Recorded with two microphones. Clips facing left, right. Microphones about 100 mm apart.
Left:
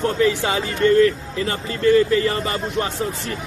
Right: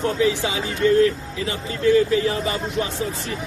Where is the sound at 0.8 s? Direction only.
55° left (ahead or behind).